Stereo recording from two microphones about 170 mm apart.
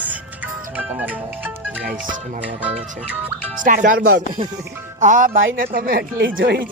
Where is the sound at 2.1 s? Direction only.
50° right (ahead or behind).